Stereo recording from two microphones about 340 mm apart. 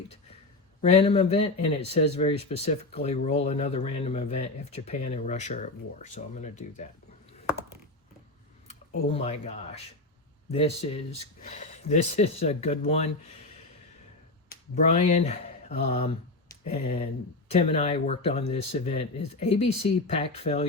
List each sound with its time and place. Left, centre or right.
0.8 s speech: centre
9.0 s speech: centre
14.5 s speech: left
18.4 s speech: left
18.7 s speech: centre